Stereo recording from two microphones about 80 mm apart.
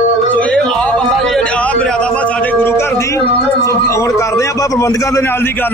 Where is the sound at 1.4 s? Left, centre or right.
Centre.